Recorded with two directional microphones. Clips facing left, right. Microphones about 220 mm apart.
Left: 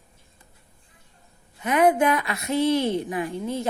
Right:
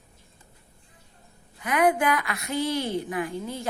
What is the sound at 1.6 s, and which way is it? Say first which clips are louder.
A woman's voice: left 3 dB; 25° left (ahead or behind).